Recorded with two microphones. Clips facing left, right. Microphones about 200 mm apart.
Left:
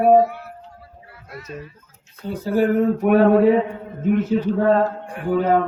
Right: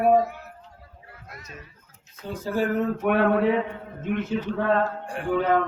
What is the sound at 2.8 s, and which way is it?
A man's voice, 35° left (ahead or behind).